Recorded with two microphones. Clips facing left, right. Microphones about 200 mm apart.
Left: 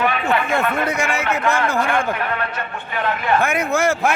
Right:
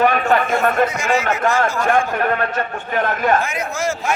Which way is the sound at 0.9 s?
60° left (ahead or behind).